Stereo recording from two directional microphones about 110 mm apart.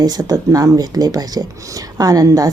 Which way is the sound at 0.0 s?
35° right (ahead or behind).